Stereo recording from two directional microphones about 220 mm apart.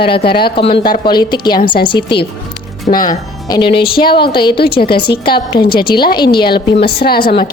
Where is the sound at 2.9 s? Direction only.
40° left (ahead or behind).